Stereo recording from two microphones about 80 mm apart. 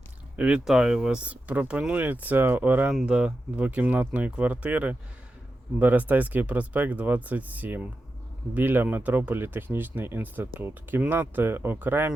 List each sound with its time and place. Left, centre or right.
0.3 s speech: centre